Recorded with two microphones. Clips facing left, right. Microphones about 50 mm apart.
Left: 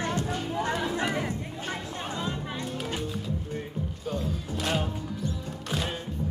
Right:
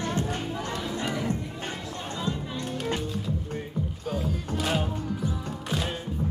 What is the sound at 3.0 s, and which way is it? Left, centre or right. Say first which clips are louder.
Music: right 1 dB; centre.